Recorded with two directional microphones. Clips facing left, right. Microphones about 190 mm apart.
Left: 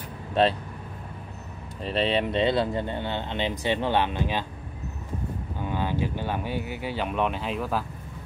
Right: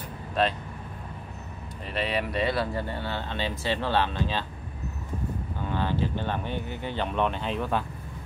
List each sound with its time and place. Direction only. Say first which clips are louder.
0.3 s speech: left 4 dB; 30° left (ahead or behind)
1.8 s speech: left 5 dB; 30° left (ahead or behind)
5.6 s speech: left 1 dB; 15° left (ahead or behind)